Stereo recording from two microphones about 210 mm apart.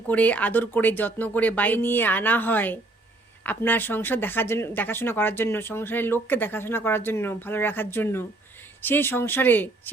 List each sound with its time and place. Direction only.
0.1 s speech: 5° left (ahead or behind)